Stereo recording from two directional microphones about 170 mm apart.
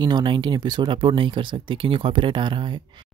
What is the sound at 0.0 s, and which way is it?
Speech, 25° right (ahead or behind).